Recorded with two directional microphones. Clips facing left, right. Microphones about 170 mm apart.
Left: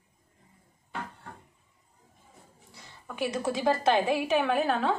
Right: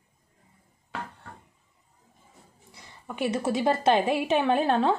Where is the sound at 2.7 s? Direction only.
20° right (ahead or behind).